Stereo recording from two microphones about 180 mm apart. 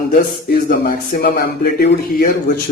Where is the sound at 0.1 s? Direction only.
50° left (ahead or behind).